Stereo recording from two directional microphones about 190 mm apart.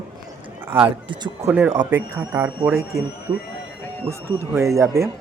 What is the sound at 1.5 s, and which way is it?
Speech, 10° right (ahead or behind).